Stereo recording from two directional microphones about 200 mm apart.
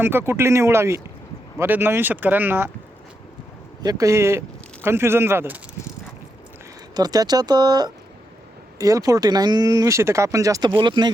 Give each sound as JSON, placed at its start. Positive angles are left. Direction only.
{"t": 0.0, "sound": "speech", "side_deg": -10}
{"t": 3.8, "sound": "speech", "side_deg": -15}
{"t": 6.9, "sound": "speech", "side_deg": -20}